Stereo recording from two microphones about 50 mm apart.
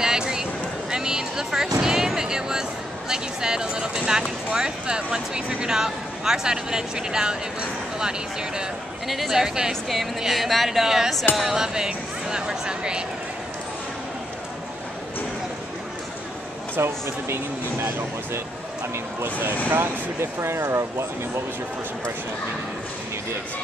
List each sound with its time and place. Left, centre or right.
0.0 s a sound: centre
1.8 s music: centre
3.1 s speech: centre
9.0 s speech: centre
16.7 s speech: right
19.7 s speech: right